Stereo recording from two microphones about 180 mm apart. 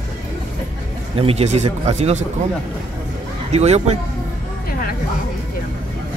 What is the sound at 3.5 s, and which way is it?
Speech, 35° right (ahead or behind).